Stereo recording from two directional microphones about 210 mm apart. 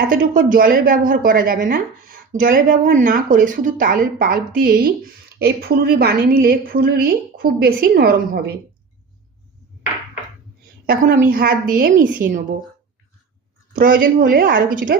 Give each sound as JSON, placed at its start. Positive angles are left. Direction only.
{"t": 0.1, "sound": "a woman's voice", "side_deg": -40}
{"t": 10.8, "sound": "a woman's voice", "side_deg": -40}
{"t": 13.7, "sound": "a woman's voice", "side_deg": -40}